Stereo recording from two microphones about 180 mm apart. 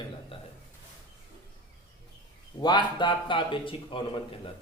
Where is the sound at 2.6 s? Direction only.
25° left (ahead or behind).